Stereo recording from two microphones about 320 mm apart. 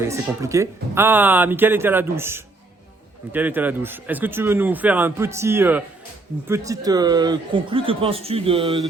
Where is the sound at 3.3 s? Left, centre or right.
Centre.